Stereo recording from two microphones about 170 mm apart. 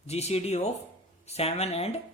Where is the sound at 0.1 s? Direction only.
40° left (ahead or behind).